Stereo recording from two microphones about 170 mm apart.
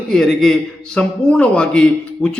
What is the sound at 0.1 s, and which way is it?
A man's voice, centre (ahead or behind).